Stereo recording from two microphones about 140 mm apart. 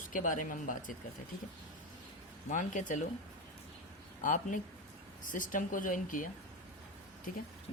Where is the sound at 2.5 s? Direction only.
65° left (ahead or behind).